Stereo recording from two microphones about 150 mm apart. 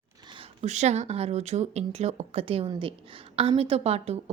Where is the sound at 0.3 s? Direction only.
50° right (ahead or behind).